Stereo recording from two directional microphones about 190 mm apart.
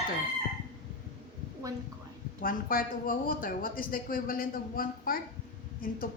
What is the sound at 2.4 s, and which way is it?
A woman's voice, 50° left (ahead or behind).